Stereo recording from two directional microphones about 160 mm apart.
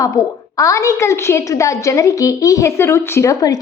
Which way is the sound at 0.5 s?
20° left (ahead or behind).